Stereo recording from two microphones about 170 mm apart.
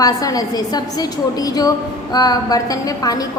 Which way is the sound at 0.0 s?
20° left (ahead or behind).